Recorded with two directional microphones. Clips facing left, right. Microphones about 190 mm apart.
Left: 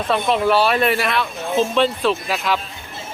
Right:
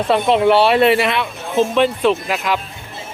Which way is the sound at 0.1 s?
25° right (ahead or behind).